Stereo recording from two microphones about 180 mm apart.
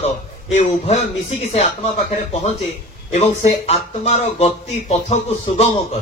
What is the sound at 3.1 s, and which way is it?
A man's voice, 40° left (ahead or behind).